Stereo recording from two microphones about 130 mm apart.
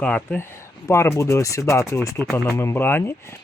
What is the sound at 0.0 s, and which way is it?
Speech, 10° left (ahead or behind).